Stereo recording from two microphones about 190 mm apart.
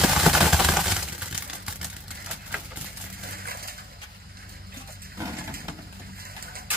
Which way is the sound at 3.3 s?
50° right (ahead or behind).